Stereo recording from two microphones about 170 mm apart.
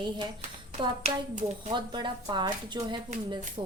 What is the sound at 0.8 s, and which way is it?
Speech, 40° right (ahead or behind).